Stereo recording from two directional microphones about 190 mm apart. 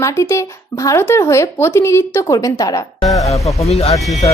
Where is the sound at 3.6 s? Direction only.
35° left (ahead or behind).